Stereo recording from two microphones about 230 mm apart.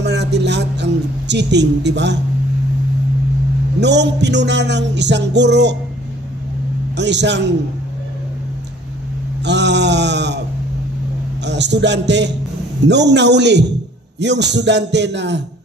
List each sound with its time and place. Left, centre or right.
0.0 s speech: right
3.8 s music: right
7.0 s music: right
9.4 s a sound: right
11.4 s music: right